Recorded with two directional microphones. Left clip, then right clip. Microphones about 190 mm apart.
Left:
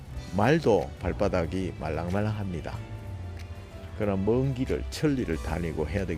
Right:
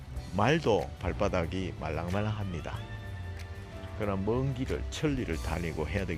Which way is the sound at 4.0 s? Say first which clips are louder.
Left 5 dB; 25° left (ahead or behind).